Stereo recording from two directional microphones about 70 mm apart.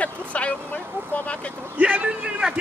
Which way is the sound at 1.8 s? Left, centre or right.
Centre.